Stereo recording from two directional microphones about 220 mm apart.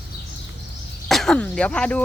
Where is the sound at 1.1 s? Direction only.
Centre (ahead or behind).